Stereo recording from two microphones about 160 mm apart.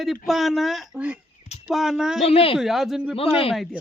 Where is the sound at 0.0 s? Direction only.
Centre (ahead or behind).